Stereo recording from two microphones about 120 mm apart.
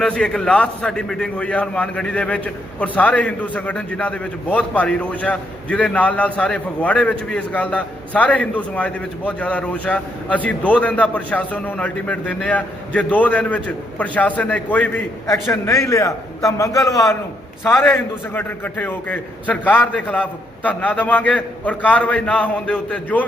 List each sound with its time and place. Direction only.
0.0 s a man's voice: 5° left (ahead or behind)